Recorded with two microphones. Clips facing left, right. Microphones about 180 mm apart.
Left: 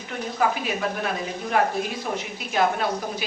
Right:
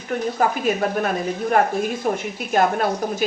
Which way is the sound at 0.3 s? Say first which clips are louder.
Right 2 dB; 45° right (ahead or behind).